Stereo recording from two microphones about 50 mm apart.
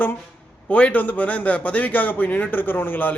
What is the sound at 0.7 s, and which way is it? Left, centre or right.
Speech, left.